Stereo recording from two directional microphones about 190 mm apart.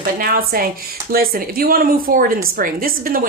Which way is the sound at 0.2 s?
50° right (ahead or behind).